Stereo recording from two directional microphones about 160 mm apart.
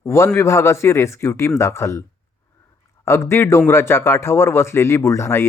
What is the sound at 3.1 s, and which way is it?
A man's voice, 15° left (ahead or behind).